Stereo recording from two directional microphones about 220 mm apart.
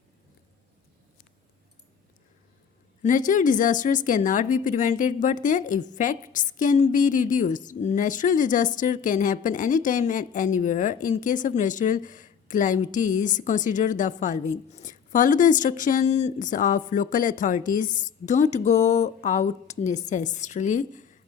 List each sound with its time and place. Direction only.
3.0 s speech: 35° left (ahead or behind)